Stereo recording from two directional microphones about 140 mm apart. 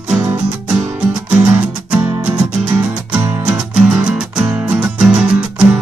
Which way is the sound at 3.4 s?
10° right (ahead or behind).